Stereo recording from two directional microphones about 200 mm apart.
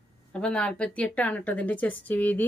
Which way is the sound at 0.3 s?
5° left (ahead or behind).